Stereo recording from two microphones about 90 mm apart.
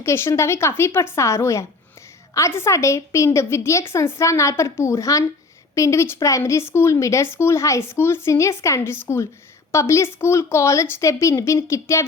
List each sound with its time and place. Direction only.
0.0 s speech: 30° left (ahead or behind)